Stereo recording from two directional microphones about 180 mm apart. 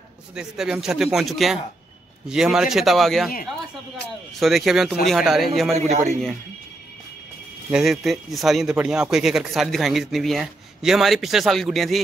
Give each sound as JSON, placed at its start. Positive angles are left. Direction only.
{"t": 0.3, "sound": "speech", "side_deg": -5}
{"t": 4.4, "sound": "speech", "side_deg": 0}
{"t": 5.8, "sound": "a man's voice", "side_deg": -40}
{"t": 7.7, "sound": "speech", "side_deg": 0}